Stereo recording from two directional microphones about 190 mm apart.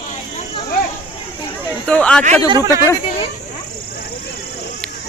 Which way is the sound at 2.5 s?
15° right (ahead or behind).